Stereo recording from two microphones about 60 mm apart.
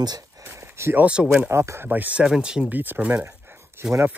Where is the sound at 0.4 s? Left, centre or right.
Right.